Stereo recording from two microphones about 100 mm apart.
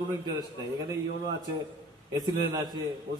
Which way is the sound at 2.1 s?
45° right (ahead or behind).